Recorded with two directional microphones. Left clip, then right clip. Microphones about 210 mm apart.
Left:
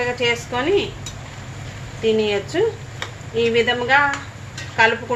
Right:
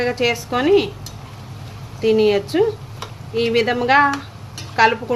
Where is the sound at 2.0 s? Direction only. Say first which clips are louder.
Right 3 dB; 50° right (ahead or behind).